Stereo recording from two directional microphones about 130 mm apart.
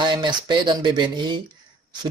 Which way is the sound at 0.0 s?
35° right (ahead or behind).